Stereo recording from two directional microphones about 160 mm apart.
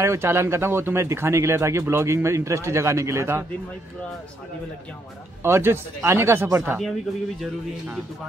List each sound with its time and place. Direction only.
0.0 s speech: 15° right (ahead or behind)
5.4 s speech: 15° right (ahead or behind)